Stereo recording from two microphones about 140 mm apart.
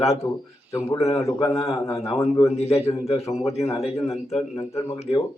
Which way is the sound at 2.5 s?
50° left (ahead or behind).